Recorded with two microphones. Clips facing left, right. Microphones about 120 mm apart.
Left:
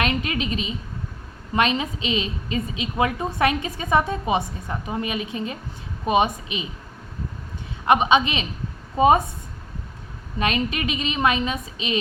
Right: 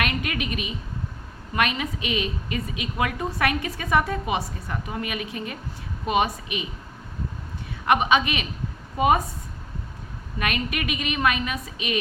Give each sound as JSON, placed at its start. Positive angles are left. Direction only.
{"t": 0.0, "sound": "a woman's voice", "side_deg": 25}
{"t": 7.9, "sound": "a woman's voice", "side_deg": 20}
{"t": 10.3, "sound": "a woman's voice", "side_deg": 25}